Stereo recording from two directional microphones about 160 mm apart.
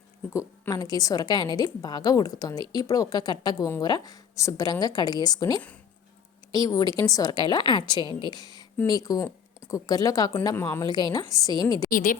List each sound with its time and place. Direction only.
0.3 s a woman's voice: 20° left (ahead or behind)
11.9 s a woman's voice: 60° left (ahead or behind)